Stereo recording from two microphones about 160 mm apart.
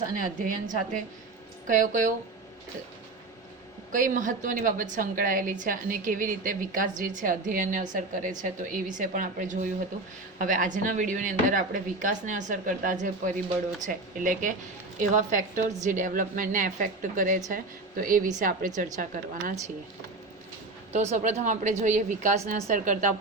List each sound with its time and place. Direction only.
0.4 s a woman's voice: 55° right (ahead or behind)
3.9 s a woman's voice: 55° right (ahead or behind)
20.9 s a woman's voice: 45° right (ahead or behind)